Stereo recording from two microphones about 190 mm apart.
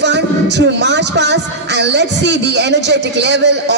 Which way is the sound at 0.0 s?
65° right (ahead or behind).